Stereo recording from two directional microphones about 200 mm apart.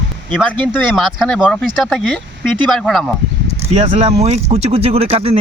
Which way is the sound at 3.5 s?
35° right (ahead or behind).